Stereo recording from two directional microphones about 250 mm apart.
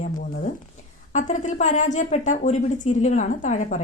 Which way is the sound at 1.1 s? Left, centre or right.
Left.